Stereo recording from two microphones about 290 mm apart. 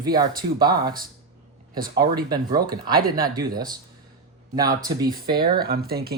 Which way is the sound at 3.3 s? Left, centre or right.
Centre.